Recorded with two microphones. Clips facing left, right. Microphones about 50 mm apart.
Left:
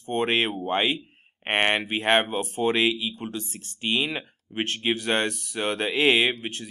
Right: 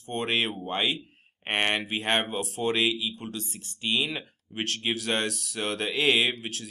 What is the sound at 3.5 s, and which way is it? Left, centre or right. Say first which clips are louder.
Speech: left 1 dB; left.